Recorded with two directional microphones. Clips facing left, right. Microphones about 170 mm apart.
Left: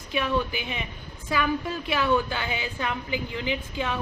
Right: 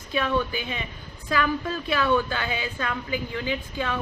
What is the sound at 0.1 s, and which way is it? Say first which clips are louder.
A woman's voice: right 1 dB; 15° left (ahead or behind).